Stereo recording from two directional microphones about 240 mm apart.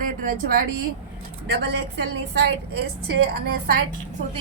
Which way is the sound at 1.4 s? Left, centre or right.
Right.